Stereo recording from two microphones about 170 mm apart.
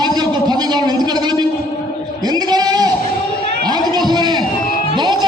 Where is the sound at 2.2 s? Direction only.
25° right (ahead or behind).